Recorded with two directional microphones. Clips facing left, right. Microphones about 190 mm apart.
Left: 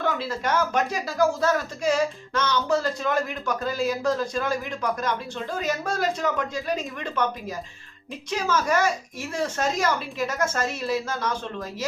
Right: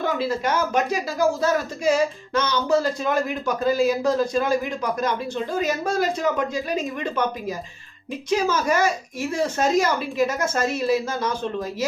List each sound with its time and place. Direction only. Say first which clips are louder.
0.0 s speech: right 3 dB; 10° right (ahead or behind)